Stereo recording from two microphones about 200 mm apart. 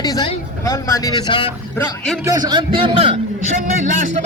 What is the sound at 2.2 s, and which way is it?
Speech, 20° right (ahead or behind).